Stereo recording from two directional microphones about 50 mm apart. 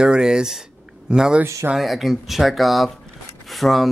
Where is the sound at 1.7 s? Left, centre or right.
Centre.